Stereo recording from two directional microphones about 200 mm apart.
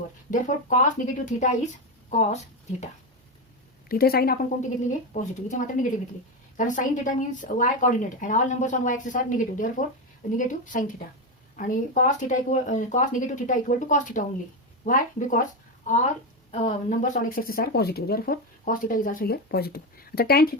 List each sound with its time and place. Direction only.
0.3 s a woman's voice: 40° left (ahead or behind)
3.8 s speech: 50° left (ahead or behind)
4.9 s a woman's voice: 40° left (ahead or behind)